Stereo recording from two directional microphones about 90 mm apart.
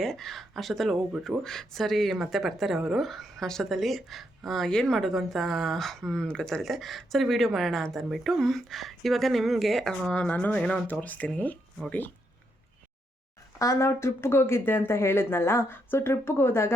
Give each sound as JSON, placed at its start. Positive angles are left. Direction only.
{"t": 0.0, "sound": "speech", "side_deg": 5}
{"t": 13.6, "sound": "speech", "side_deg": 35}